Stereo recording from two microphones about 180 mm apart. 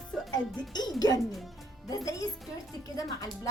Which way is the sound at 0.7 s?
20° left (ahead or behind).